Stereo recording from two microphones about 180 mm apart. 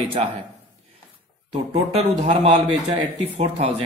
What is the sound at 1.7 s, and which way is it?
Speech, 35° right (ahead or behind).